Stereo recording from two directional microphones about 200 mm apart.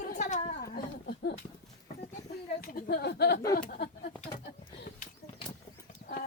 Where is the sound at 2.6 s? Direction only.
50° left (ahead or behind).